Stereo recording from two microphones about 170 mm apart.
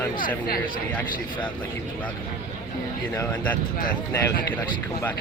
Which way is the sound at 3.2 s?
10° left (ahead or behind).